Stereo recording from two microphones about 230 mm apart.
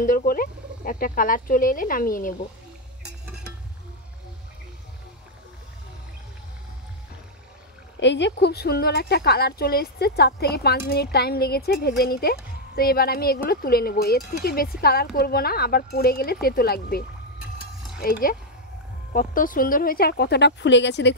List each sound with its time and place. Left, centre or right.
0.0 s speech: left
8.0 s speech: left
17.4 s mechanisms: centre
19.1 s speech: left